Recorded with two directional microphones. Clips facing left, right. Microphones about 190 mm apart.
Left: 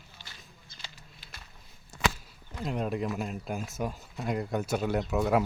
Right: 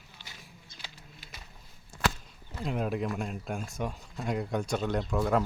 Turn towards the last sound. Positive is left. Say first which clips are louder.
# left 1 dB
turn(degrees=5)  # may be behind; listen again after turning